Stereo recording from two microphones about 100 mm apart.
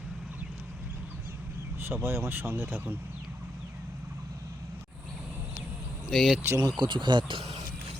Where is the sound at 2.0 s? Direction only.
25° right (ahead or behind).